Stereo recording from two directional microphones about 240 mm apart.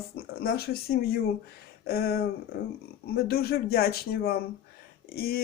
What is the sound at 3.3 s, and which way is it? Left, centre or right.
Speech, left.